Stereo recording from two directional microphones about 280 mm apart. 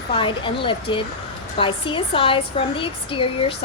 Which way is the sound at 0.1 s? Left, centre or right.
Centre.